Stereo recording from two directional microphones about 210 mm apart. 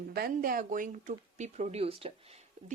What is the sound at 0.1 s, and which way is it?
Speech, 45° right (ahead or behind).